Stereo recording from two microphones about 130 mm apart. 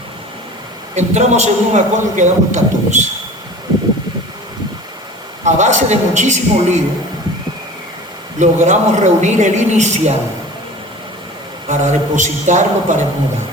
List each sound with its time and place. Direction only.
0.9 s a man's voice: 60° right (ahead or behind)
5.5 s a man's voice: 65° right (ahead or behind)
8.4 s a man's voice: 65° right (ahead or behind)
11.7 s a man's voice: 70° right (ahead or behind)